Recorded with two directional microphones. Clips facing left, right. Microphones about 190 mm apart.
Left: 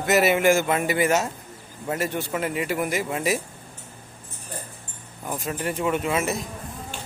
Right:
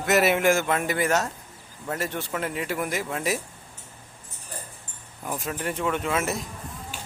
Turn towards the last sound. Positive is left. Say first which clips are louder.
# left 2 dB
turn(degrees=0)  # may be behind; listen again after turning